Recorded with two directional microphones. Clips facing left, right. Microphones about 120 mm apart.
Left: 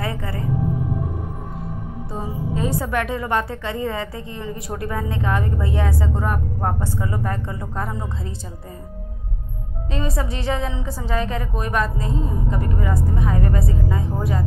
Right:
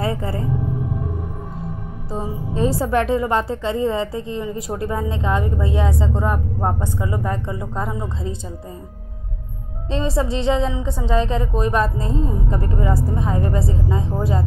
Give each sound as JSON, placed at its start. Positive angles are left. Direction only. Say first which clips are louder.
{"t": 0.0, "sound": "a woman's voice", "louder": "right 4 dB", "side_deg": -30}
{"t": 2.1, "sound": "a woman's voice", "louder": "right 3 dB", "side_deg": -30}
{"t": 9.8, "sound": "a woman's voice", "louder": "right 5 dB", "side_deg": -30}